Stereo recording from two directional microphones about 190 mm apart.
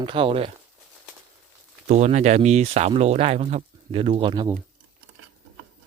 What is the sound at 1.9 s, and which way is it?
Speech, 35° right (ahead or behind).